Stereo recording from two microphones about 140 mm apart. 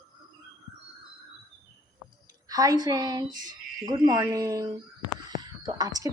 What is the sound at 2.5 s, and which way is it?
A woman's voice, 25° right (ahead or behind).